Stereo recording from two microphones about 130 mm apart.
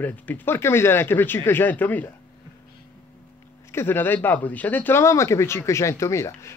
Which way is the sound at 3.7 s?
20° left (ahead or behind).